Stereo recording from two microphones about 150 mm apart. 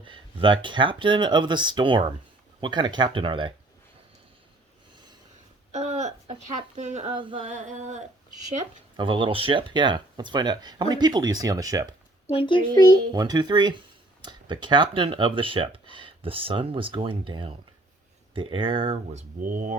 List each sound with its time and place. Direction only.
0.0 s speech: 35° right (ahead or behind)
5.7 s a sound: 50° right (ahead or behind)
7.2 s speech: 35° right (ahead or behind)
7.5 s a sound: 50° right (ahead or behind)
9.0 s speech: 35° right (ahead or behind)
12.3 s speech: 35° left (ahead or behind)
13.1 s speech: 25° right (ahead or behind)
19.4 s speech: 60° right (ahead or behind)